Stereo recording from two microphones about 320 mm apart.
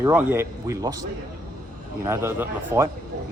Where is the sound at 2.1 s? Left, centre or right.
Centre.